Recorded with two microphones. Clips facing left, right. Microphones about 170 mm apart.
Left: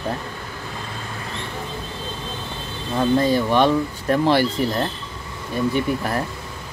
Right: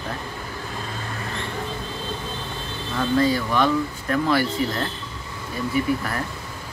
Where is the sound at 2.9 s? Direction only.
25° left (ahead or behind).